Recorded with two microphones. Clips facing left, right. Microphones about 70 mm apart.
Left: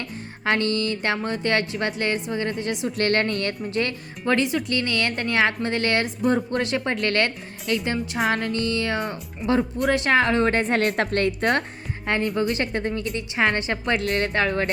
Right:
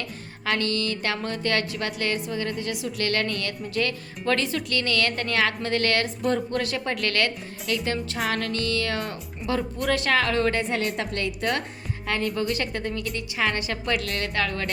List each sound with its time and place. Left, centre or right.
0.4 s speech: left; by 8.6 s centre
8.6 s speech: left
9.0 s speech: centre
9.9 s speech: left
10.6 s a woman's voice: left
12.4 s speech: left